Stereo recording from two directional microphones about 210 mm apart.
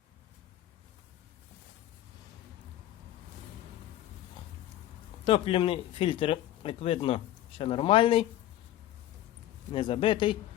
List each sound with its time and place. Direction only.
5.2 s speech: 25° left (ahead or behind)
9.7 s speech: 25° left (ahead or behind)